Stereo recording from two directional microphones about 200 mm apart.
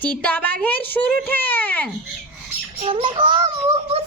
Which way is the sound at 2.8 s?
25° right (ahead or behind).